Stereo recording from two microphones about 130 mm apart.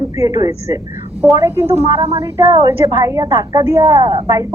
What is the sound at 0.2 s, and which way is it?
A woman's voice, 30° right (ahead or behind).